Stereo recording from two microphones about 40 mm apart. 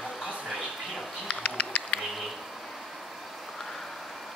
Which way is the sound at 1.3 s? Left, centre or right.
Left.